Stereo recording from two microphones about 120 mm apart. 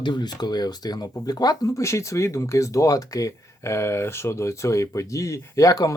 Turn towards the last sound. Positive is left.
turn(degrees=30)  # may be behind; listen again after turning